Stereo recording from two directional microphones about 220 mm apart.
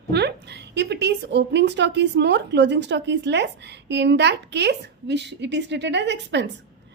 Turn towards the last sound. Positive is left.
turn(degrees=-50)  # may be behind; listen again after turning